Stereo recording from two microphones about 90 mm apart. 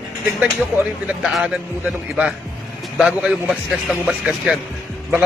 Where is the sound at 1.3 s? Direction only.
10° right (ahead or behind).